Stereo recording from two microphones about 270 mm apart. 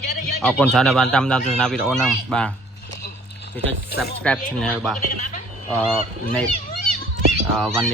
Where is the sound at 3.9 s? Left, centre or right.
Left.